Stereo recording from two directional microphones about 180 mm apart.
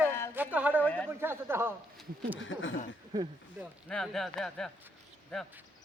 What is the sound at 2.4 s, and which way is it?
Speech, 90° left.